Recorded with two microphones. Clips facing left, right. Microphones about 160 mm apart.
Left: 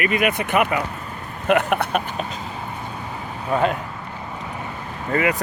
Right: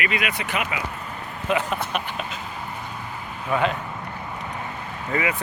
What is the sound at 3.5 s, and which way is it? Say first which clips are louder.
Speech: left 3 dB; 45° left (ahead or behind).